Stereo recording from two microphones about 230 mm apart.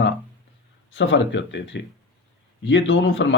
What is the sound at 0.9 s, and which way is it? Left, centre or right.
Speech, left.